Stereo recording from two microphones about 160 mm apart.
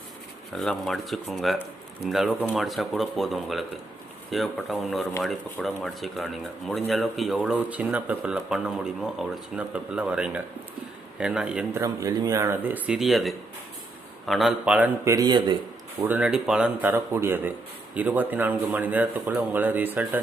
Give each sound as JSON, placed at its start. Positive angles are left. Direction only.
{"t": 0.5, "sound": "speech", "side_deg": 5}
{"t": 11.8, "sound": "speech", "side_deg": -20}
{"t": 15.1, "sound": "a man's voice", "side_deg": -25}
{"t": 16.0, "sound": "speech", "side_deg": -10}